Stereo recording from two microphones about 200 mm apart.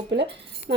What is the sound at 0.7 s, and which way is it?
Speech, 55° right (ahead or behind).